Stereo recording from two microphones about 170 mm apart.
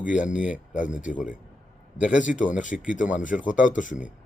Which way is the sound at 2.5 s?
50° left (ahead or behind).